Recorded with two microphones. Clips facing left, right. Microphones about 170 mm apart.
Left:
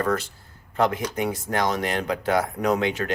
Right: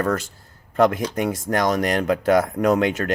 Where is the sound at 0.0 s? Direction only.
45° right (ahead or behind).